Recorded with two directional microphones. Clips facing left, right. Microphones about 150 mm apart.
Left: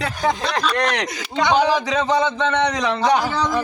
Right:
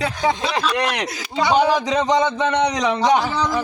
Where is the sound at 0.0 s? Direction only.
Centre (ahead or behind).